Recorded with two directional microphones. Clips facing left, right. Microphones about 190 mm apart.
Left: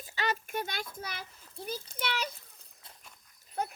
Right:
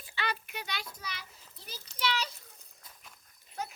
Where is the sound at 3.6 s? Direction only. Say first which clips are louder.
Left 5 dB; 55° left (ahead or behind).